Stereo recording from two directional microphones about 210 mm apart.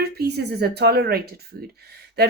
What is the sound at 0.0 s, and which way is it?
A woman's voice, 50° right (ahead or behind).